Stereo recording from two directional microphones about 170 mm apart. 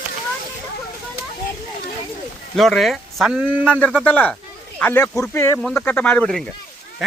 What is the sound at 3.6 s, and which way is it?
Speech, 10° left (ahead or behind).